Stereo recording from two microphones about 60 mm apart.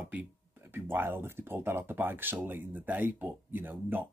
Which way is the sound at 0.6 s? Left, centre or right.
Right.